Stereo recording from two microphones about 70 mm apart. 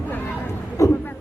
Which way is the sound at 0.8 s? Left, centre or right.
Left.